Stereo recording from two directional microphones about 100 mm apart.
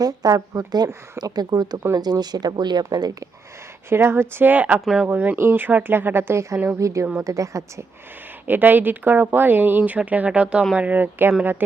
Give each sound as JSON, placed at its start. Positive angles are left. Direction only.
{"t": 0.0, "sound": "speech", "side_deg": -40}
{"t": 3.8, "sound": "speech", "side_deg": -25}
{"t": 8.4, "sound": "speech", "side_deg": -20}